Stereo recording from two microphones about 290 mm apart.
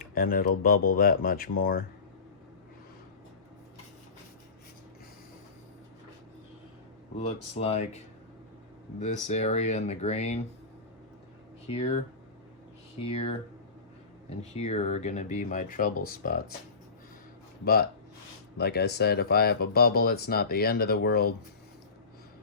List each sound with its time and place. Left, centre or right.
0.0 s a sound: left
0.6 s speech: left
7.2 s speech: left
13.0 s speech: centre
18.5 s speech: left